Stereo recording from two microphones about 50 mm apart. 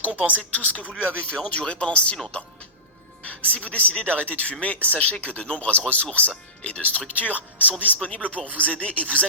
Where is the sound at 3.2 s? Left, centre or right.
Left.